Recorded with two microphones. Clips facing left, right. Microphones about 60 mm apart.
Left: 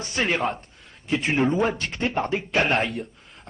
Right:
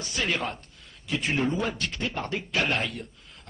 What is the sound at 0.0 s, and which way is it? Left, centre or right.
Speech, left.